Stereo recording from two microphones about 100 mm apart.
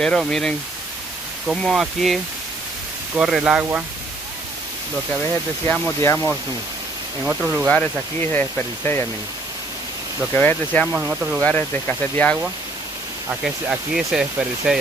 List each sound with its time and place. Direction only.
0.0 s speech: 5° left (ahead or behind)
3.2 s speech: 5° right (ahead or behind)
5.9 s speech: 25° left (ahead or behind)
7.2 s speech: 15° right (ahead or behind)
7.6 s speech: 15° left (ahead or behind)
10.3 s speech: 20° left (ahead or behind)
10.9 s speech: 15° right (ahead or behind)
11.4 s speech: 15° left (ahead or behind)
13.4 s speech: 5° right (ahead or behind)